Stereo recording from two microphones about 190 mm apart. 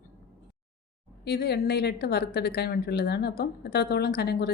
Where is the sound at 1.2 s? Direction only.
60° left (ahead or behind).